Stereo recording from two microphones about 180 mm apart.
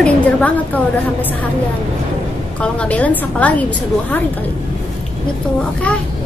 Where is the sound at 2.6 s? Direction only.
5° left (ahead or behind).